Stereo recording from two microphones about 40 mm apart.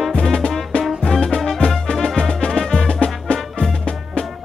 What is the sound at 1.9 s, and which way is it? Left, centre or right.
Music, centre.